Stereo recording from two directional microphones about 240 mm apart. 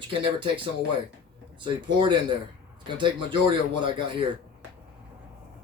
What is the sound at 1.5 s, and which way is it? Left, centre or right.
Speech, centre.